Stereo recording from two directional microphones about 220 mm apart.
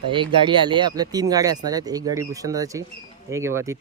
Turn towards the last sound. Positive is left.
turn(degrees=-10)  # may be behind; listen again after turning